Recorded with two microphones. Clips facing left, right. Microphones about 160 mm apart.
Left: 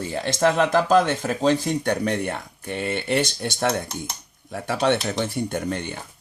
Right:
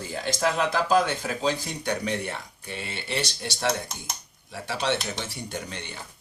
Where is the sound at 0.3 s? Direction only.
50° left (ahead or behind).